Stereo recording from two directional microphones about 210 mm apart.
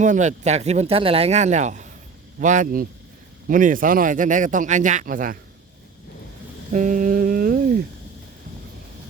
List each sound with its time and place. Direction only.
0.0 s speech: 35° right (ahead or behind)
6.7 s humming: 40° right (ahead or behind)